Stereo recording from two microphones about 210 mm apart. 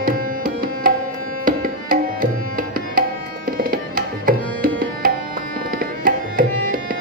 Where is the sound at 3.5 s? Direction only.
40° right (ahead or behind).